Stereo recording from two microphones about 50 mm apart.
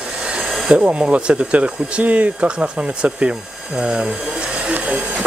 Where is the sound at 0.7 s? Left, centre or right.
Right.